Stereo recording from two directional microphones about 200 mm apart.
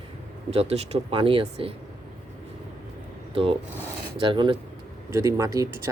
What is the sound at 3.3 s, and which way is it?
Speech, 30° right (ahead or behind).